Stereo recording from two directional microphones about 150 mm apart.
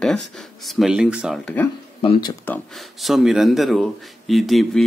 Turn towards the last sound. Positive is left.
turn(degrees=0)  # may be behind; listen again after turning